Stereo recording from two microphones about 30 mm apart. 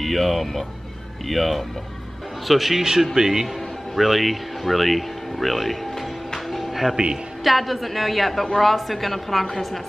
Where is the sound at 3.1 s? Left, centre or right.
Centre.